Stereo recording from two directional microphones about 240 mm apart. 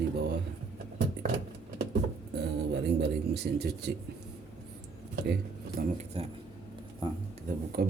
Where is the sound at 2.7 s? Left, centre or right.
Right.